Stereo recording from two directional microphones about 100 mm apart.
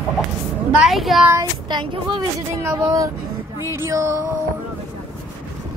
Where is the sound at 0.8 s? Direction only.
Centre (ahead or behind).